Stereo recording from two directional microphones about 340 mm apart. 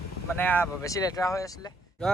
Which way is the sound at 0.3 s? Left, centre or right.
Centre.